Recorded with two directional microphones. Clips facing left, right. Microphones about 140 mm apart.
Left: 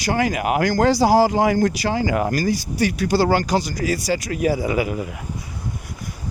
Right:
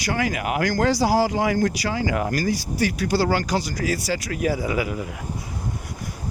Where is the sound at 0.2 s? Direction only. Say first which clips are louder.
Left 4 dB; 30° left (ahead or behind).